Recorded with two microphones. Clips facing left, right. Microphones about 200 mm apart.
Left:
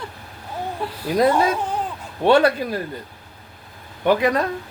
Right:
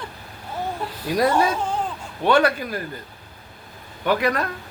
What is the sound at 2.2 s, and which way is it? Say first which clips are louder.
Speech: left 3 dB; 30° left (ahead or behind).